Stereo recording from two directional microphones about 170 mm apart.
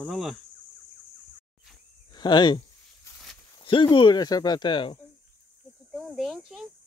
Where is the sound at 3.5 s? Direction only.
25° left (ahead or behind).